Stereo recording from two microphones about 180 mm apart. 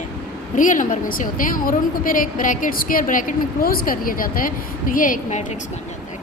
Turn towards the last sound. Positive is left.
turn(degrees=50)  # may be behind; listen again after turning